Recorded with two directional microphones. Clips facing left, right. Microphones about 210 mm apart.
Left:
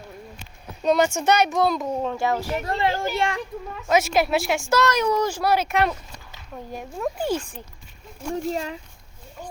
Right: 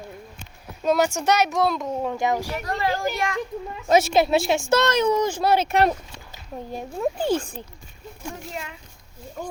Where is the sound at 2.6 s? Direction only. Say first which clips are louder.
Left 1 dB; 25° left (ahead or behind).